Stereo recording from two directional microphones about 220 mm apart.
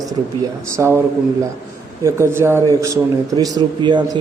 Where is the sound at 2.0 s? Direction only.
10° right (ahead or behind).